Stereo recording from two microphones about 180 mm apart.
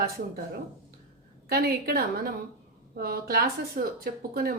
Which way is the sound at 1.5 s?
55° right (ahead or behind).